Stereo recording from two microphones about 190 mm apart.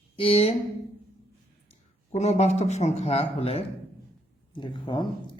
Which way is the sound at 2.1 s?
35° left (ahead or behind).